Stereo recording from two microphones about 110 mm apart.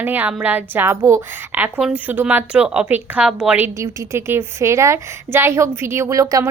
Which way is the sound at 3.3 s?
5° right (ahead or behind).